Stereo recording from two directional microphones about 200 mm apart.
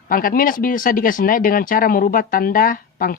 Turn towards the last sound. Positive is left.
turn(degrees=45)  # may be behind; listen again after turning